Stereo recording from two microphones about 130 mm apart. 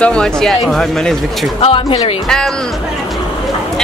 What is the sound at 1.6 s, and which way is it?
Speech, 45° left (ahead or behind).